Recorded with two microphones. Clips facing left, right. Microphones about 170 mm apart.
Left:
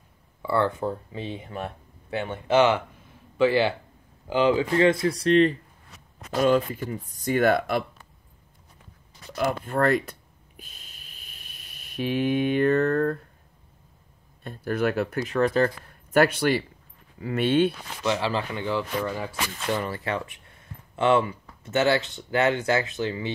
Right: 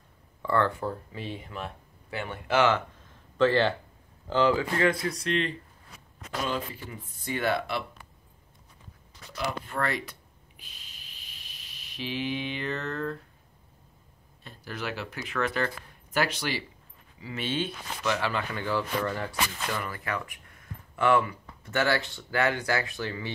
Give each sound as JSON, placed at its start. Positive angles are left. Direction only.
{"t": 0.4, "sound": "speech", "side_deg": 10}
{"t": 9.3, "sound": "speech", "side_deg": 50}
{"t": 10.6, "sound": "a sound", "side_deg": 50}
{"t": 14.4, "sound": "speech", "side_deg": 55}
{"t": 15.3, "sound": "speech", "side_deg": 35}
{"t": 16.1, "sound": "speech", "side_deg": 55}
{"t": 18.0, "sound": "speech", "side_deg": 25}
{"t": 19.7, "sound": "speech", "side_deg": 30}